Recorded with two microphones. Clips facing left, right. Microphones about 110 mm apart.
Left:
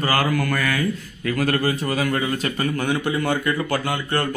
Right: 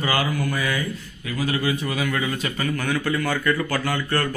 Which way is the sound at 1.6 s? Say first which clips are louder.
Left 2 dB; 40° left (ahead or behind).